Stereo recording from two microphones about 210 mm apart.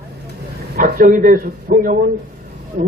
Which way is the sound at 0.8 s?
40° right (ahead or behind).